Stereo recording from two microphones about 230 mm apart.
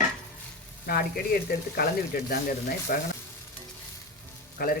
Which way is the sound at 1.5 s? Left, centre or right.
Left.